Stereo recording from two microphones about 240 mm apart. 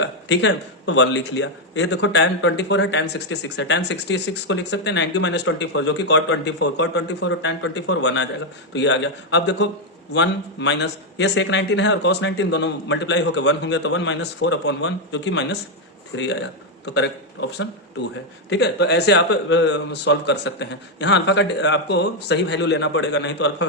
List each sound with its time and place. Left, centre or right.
0.0 s a man's voice: left
18.5 s speech: left